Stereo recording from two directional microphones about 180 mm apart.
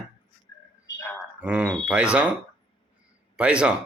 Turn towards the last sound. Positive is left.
turn(degrees=-5)  # may be behind; listen again after turning